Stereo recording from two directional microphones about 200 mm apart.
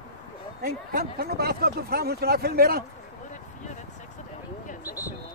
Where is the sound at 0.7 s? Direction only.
50° right (ahead or behind).